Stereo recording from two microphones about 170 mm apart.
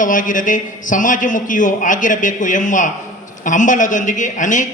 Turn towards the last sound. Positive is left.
turn(degrees=50)  # may be behind; listen again after turning